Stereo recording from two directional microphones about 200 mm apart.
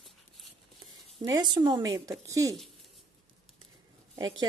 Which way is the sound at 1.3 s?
20° right (ahead or behind).